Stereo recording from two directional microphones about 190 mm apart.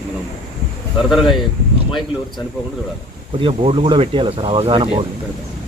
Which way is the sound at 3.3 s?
30° right (ahead or behind).